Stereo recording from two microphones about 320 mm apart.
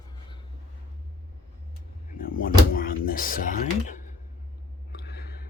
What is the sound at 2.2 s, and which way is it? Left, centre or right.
Speech, left.